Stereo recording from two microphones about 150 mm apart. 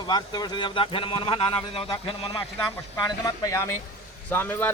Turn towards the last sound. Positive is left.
turn(degrees=15)  # may be behind; listen again after turning